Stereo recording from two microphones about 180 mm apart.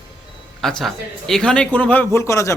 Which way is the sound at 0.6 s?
Centre (ahead or behind).